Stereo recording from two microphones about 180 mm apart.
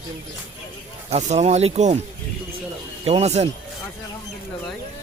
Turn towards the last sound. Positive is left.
turn(degrees=-35)  # may be behind; listen again after turning